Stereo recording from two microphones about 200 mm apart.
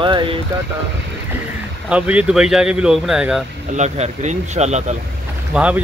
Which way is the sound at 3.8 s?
35° right (ahead or behind).